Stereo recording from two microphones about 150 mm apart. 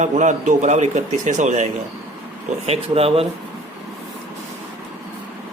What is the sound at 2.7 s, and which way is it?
Speech, 40° right (ahead or behind).